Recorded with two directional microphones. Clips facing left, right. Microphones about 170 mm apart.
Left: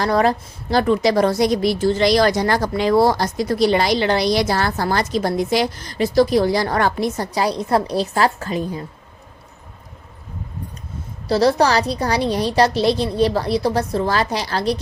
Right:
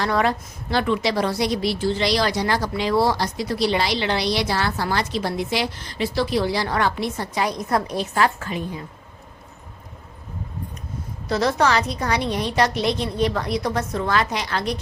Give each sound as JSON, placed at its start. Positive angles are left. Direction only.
{"t": 0.0, "sound": "a woman's voice", "side_deg": 40}
{"t": 11.3, "sound": "a woman's voice", "side_deg": 35}